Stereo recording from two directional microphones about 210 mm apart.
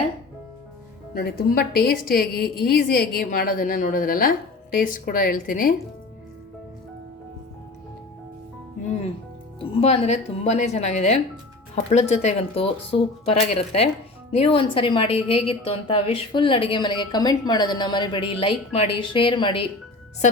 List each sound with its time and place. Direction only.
1.1 s a woman's voice: 45° left (ahead or behind)
9.6 s a woman's voice: 30° left (ahead or behind)